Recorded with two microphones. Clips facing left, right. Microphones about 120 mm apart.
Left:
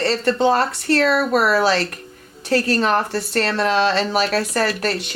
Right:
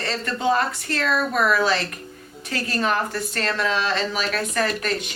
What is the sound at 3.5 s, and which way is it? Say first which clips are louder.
Speech: left 4 dB; 70° left (ahead or behind).